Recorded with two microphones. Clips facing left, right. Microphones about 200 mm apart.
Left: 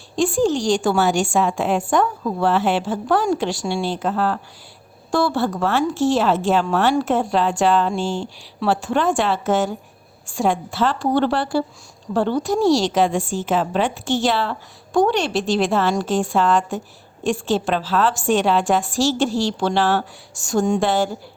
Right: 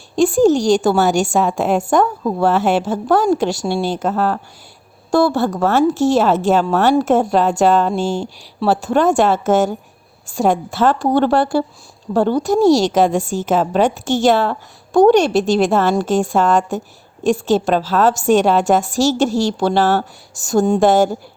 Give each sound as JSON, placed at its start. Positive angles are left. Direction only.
{"t": 0.2, "sound": "a woman's voice", "side_deg": -40}